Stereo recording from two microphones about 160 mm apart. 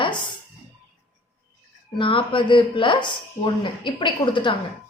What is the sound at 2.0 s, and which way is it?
Speech, 30° left (ahead or behind).